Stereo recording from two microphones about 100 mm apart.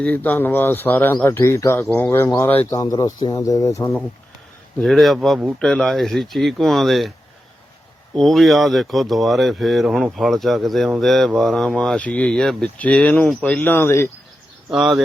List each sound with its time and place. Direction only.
0.0 s speech: 15° left (ahead or behind)
1.8 s speech: 20° left (ahead or behind)
2.6 s speech: 35° left (ahead or behind)
4.8 s speech: centre (ahead or behind)
8.1 s speech: 5° left (ahead or behind); by 14.1 s 25° left (ahead or behind)
14.7 s speech: 5° right (ahead or behind)